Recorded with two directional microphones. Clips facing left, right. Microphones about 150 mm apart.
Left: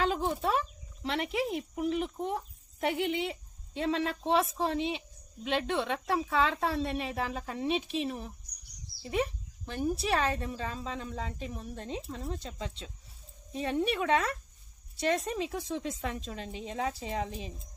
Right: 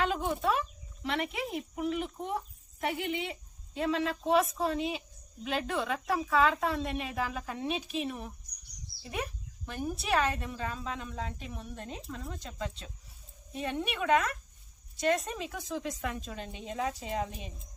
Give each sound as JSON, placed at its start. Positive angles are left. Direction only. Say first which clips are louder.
{"t": 0.0, "sound": "a woman's voice", "louder": "left 1 dB", "side_deg": 30}